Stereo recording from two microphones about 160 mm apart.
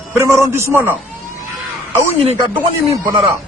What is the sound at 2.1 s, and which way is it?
Speech, 40° right (ahead or behind).